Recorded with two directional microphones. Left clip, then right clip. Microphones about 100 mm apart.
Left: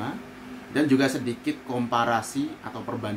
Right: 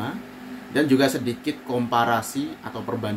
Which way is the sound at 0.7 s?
15° right (ahead or behind).